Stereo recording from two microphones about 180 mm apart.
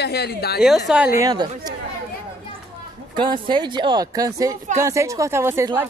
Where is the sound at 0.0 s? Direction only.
65° left (ahead or behind).